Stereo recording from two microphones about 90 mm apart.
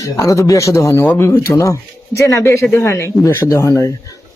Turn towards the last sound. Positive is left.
turn(degrees=35)  # may be behind; listen again after turning